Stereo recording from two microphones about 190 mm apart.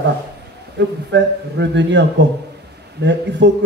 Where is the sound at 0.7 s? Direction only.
70° right (ahead or behind).